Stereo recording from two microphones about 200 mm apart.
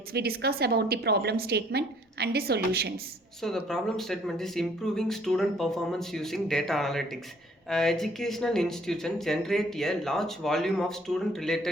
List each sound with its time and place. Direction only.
0.1 s a woman's voice: 50° right (ahead or behind)
3.4 s speech: centre (ahead or behind)